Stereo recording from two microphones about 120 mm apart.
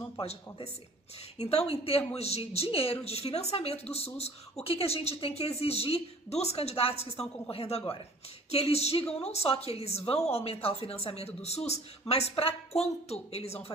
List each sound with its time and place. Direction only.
0.2 s speech: 60° left (ahead or behind)